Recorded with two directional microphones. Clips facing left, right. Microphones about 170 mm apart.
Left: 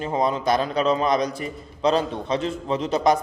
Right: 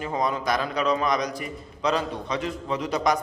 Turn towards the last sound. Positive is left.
turn(degrees=25)  # may be behind; listen again after turning